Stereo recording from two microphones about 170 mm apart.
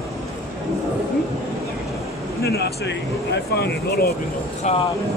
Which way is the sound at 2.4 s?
75° left (ahead or behind).